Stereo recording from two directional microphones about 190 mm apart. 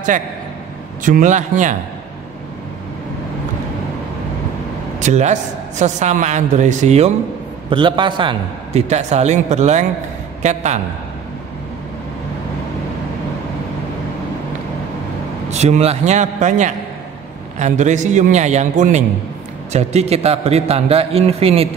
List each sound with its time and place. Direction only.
1.0 s a woman's voice: 40° right (ahead or behind)
5.0 s a woman's voice: 40° right (ahead or behind)
7.7 s a man's voice: 25° right (ahead or behind)
8.8 s a woman's voice: 35° right (ahead or behind)
15.5 s a woman's voice: 35° right (ahead or behind)